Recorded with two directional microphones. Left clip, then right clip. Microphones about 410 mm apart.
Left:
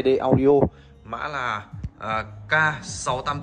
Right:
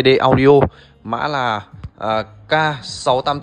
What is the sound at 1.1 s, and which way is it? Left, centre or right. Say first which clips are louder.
A man's voice: right 8 dB; centre.